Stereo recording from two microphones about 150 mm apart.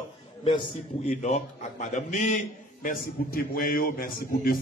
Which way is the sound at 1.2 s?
50° left (ahead or behind).